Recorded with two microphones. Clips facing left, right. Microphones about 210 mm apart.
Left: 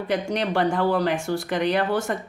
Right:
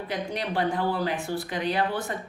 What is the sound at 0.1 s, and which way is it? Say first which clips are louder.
Speech: left 7 dB; 80° left.